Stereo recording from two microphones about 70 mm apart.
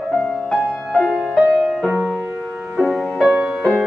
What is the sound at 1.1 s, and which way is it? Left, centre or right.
Music, centre.